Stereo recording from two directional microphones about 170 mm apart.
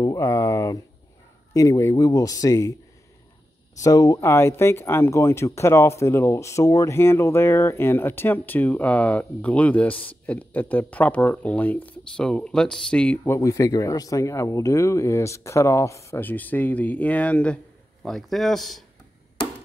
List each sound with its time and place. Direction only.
0.0 s speech: 20° left (ahead or behind)
3.8 s speech: 20° left (ahead or behind); by 18.9 s centre (ahead or behind)